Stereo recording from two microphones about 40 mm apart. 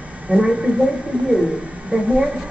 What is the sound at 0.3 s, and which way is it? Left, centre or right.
Speech, centre.